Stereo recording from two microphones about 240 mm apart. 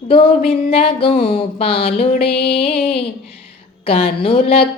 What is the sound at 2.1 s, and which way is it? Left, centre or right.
Music, left.